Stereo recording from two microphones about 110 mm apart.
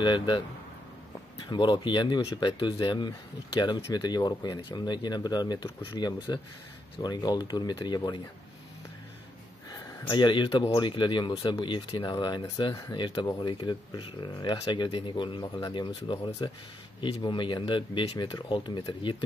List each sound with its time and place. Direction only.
0.0 s speech: 45° left (ahead or behind)
1.5 s speech: 45° left (ahead or behind)
4.6 s speech: 45° left (ahead or behind)
9.7 s a sound: 45° left (ahead or behind)
10.8 s speech: 45° left (ahead or behind)